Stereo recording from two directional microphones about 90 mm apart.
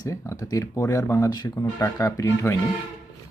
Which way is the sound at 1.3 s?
50° left (ahead or behind).